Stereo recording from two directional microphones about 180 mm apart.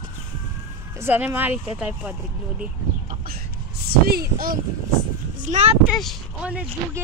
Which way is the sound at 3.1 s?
60° right (ahead or behind).